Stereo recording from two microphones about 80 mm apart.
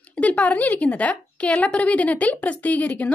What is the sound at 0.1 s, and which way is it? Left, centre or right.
A woman's voice, centre.